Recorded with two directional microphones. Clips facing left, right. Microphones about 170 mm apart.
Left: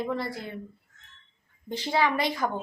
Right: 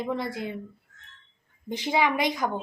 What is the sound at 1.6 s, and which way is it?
Speech, 15° right (ahead or behind).